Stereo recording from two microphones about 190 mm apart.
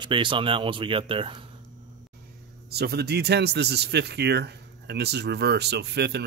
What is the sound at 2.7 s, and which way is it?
Speech, 60° right (ahead or behind).